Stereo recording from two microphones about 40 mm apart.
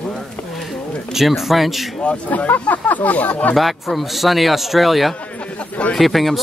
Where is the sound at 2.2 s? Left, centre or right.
Left.